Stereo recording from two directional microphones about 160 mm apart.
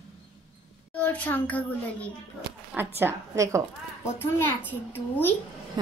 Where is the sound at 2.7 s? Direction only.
15° right (ahead or behind).